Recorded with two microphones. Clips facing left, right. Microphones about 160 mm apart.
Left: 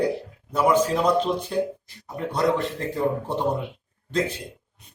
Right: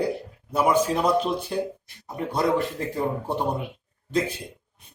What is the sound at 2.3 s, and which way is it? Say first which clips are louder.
A man's voice: even; 10° right (ahead or behind).